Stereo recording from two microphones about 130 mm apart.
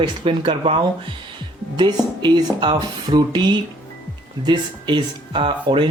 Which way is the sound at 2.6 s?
35° right (ahead or behind).